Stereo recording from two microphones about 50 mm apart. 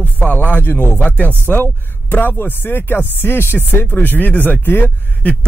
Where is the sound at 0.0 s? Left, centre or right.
Left.